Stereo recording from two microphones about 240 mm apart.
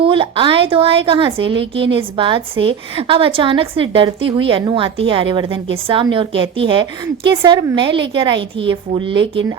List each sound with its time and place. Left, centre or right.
0.0 s a woman's voice: right